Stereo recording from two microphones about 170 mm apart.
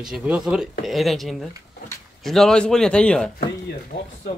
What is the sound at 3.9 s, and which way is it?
Speech, 30° left (ahead or behind).